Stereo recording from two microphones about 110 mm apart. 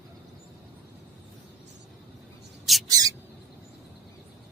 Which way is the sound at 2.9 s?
35° right (ahead or behind).